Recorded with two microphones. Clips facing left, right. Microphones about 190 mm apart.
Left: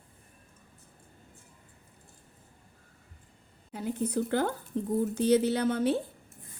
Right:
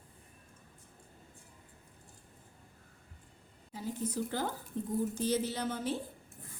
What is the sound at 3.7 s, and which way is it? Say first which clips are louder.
Speech: left 6 dB; 65° left (ahead or behind).